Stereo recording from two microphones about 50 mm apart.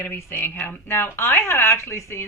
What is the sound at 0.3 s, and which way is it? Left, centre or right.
Speech, left.